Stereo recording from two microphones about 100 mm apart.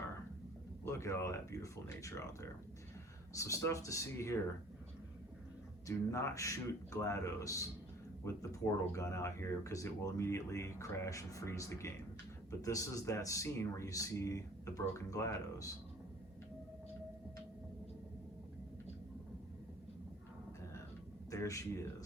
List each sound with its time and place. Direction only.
0.9 s speech: 30° left (ahead or behind)
5.9 s speech: 30° left (ahead or behind)
21.2 s speech: 35° left (ahead or behind)